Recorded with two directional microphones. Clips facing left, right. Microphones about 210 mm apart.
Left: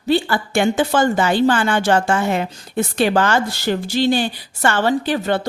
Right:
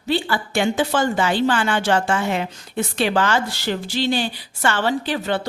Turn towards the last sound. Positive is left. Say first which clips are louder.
# left 4 dB
turn(degrees=45)  # may be behind; listen again after turning